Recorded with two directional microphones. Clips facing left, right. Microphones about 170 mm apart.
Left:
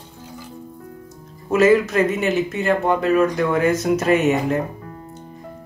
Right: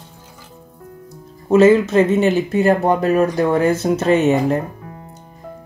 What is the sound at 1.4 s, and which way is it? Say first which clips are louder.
Speech: right 4 dB; 25° right (ahead or behind).